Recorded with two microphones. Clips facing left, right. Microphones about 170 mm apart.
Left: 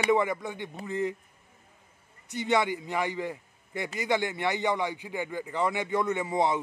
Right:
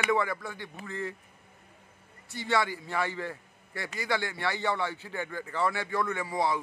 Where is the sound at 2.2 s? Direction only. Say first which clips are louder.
Left 3 dB; 20° left (ahead or behind).